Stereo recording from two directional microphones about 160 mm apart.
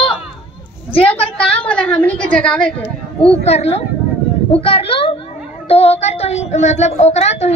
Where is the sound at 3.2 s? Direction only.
40° left (ahead or behind).